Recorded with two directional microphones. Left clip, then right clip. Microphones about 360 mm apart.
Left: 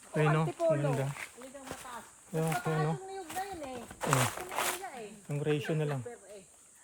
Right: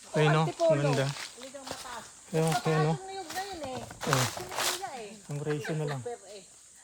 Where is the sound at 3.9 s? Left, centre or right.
Centre.